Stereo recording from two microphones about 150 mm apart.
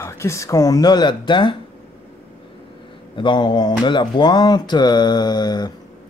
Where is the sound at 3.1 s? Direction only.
30° left (ahead or behind).